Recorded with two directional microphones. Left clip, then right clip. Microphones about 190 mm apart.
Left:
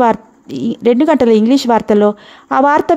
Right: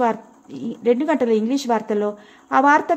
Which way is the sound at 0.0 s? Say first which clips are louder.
Left 8 dB; 50° left (ahead or behind).